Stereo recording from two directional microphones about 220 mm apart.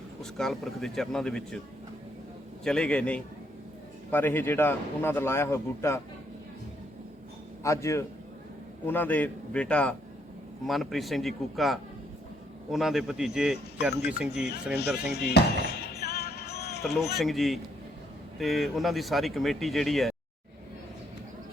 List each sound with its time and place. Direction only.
0.2 s speech: centre (ahead or behind)
2.6 s a man's voice: 5° left (ahead or behind)
7.6 s a man's voice: 15° left (ahead or behind); by 14.5 s 5° right (ahead or behind)
15.1 s music: 45° left (ahead or behind)
17.2 s speech: centre (ahead or behind)